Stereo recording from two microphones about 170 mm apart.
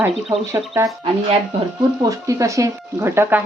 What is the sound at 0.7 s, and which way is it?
Speech, 5° right (ahead or behind).